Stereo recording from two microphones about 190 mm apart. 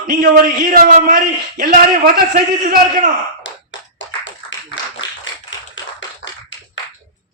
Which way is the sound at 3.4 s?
75° left (ahead or behind).